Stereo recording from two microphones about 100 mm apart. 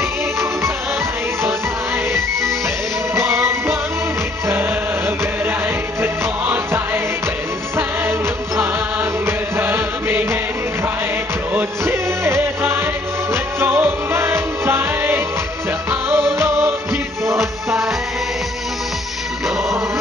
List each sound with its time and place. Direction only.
3.2 s music: 25° right (ahead or behind)
6.4 s music: 20° right (ahead or behind)
11.5 s music: 25° right (ahead or behind)